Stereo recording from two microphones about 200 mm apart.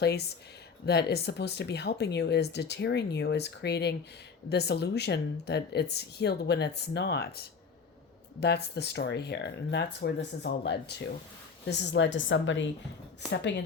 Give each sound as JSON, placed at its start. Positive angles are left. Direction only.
{"t": 0.0, "sound": "a woman's voice", "side_deg": 55}
{"t": 13.3, "sound": "speech", "side_deg": 60}